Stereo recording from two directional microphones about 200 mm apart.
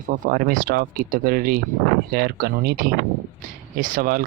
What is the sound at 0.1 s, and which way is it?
Speech, 45° right (ahead or behind).